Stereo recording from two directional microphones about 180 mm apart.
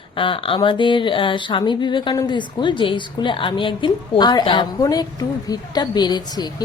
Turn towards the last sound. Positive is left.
turn(degrees=25)  # may be behind; listen again after turning